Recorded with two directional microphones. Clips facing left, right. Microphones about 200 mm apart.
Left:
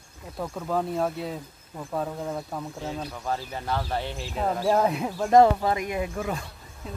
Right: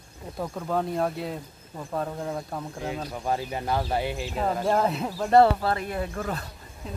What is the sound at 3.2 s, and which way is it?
Speech, 15° right (ahead or behind).